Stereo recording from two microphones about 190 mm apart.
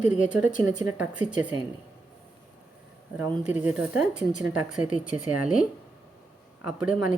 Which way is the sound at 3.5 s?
10° right (ahead or behind).